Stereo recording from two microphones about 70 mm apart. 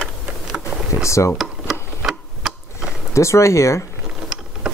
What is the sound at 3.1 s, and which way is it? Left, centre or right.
Speech, left.